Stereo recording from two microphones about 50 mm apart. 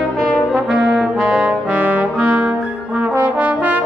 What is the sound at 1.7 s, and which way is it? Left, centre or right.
Brass instrument, right.